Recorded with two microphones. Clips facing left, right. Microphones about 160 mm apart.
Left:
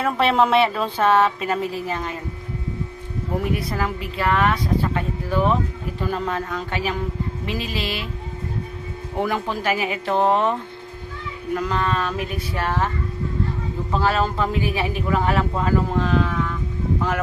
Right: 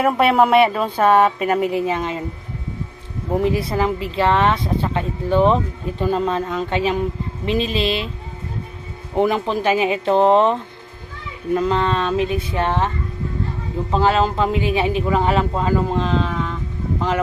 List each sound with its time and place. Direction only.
0.0 s speech: 10° right (ahead or behind)
1.7 s a man's voice: 20° right (ahead or behind)
3.4 s a man's voice: 25° right (ahead or behind)
9.1 s a man's voice: 20° right (ahead or behind)
13.9 s a man's voice: 20° right (ahead or behind)